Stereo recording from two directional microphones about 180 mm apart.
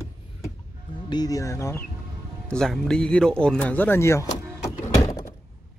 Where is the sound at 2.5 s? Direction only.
Centre (ahead or behind).